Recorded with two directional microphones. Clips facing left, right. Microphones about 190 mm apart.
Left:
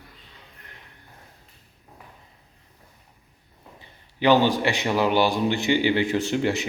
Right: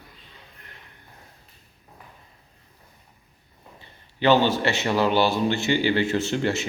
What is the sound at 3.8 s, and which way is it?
A man's voice, 15° left (ahead or behind).